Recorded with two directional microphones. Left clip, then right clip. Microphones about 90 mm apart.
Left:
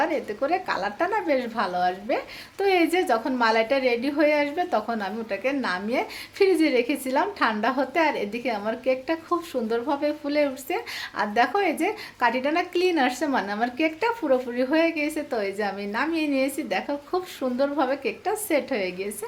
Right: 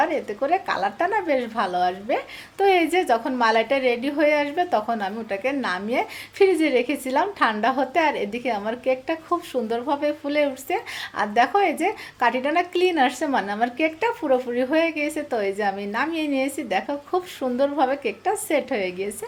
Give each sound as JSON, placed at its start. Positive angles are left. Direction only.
{"t": 0.0, "sound": "a woman's voice", "side_deg": -35}